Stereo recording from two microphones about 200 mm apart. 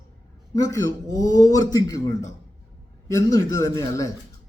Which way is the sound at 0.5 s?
15° left (ahead or behind).